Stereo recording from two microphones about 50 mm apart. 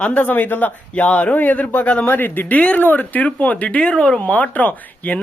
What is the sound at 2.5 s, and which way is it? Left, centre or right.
A man's voice, left.